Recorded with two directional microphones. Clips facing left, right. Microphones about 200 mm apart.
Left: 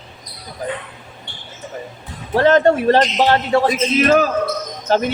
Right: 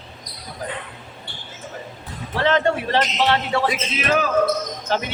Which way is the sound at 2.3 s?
45° left (ahead or behind).